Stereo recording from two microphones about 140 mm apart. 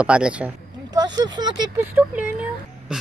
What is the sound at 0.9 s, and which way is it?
Speech, 30° right (ahead or behind).